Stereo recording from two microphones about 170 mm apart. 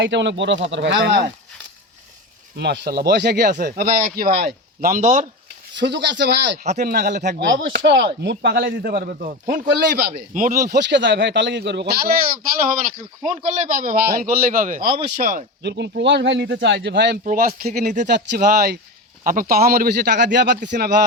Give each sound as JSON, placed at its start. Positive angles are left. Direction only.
{"t": 0.0, "sound": "speech", "side_deg": -90}
{"t": 2.6, "sound": "a man's voice", "side_deg": -75}
{"t": 5.7, "sound": "speech", "side_deg": -90}
{"t": 6.7, "sound": "speech", "side_deg": -70}
{"t": 7.3, "sound": "speech", "side_deg": -85}
{"t": 9.0, "sound": "speech", "side_deg": -60}
{"t": 9.6, "sound": "a man's voice", "side_deg": -70}
{"t": 15.6, "sound": "speech", "side_deg": -85}
{"t": 17.2, "sound": "a man's voice", "side_deg": -55}
{"t": 18.1, "sound": "speech", "side_deg": -85}
{"t": 18.4, "sound": "speech", "side_deg": -65}
{"t": 20.7, "sound": "speech", "side_deg": -70}